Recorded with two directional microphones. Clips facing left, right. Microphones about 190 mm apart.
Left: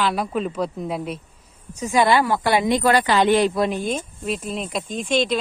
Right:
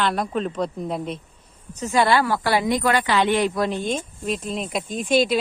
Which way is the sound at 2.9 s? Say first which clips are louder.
Left 4 dB; 40° left (ahead or behind).